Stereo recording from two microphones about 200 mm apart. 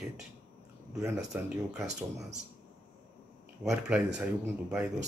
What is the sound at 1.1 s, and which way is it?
Speech, 5° right (ahead or behind).